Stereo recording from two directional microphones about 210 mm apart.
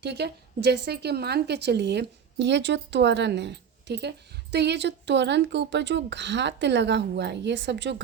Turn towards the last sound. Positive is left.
turn(degrees=-55)  # may be behind; listen again after turning